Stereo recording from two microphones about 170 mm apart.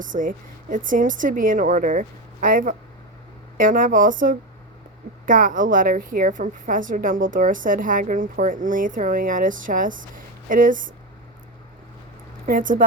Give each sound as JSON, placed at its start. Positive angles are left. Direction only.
{"t": 0.0, "sound": "a woman's voice", "side_deg": -50}
{"t": 12.5, "sound": "a woman's voice", "side_deg": -55}